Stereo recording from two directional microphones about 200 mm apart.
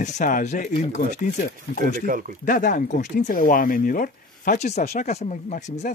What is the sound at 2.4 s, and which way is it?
Speech, 45° left (ahead or behind).